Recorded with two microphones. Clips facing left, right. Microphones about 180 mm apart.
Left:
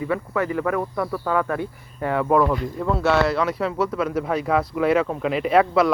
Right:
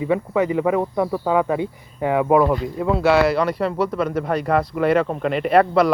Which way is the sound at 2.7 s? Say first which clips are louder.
Right 4 dB; 5° right (ahead or behind).